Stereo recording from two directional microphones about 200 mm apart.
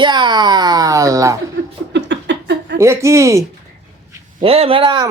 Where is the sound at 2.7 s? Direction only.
15° right (ahead or behind).